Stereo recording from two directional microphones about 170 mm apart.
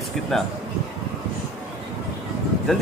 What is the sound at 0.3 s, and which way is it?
Speech, centre (ahead or behind).